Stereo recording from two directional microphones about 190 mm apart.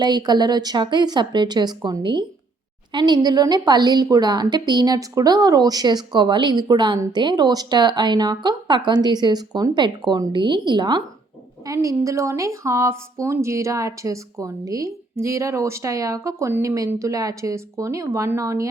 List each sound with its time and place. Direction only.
0.0 s a woman's voice: 20° right (ahead or behind)